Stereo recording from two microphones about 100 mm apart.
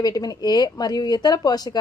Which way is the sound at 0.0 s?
40° left (ahead or behind).